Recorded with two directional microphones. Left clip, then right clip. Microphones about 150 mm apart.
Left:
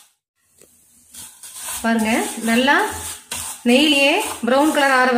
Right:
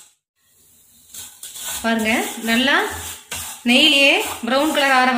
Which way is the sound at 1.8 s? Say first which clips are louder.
Even; 60° left (ahead or behind).